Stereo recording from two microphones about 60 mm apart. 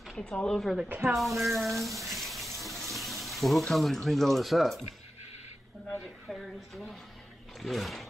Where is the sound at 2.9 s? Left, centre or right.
Centre.